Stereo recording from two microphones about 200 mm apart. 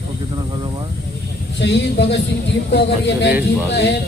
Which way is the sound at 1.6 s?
60° left (ahead or behind).